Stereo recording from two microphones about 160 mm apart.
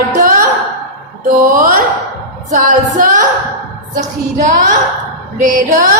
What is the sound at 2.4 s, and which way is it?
Singing, 50° right (ahead or behind).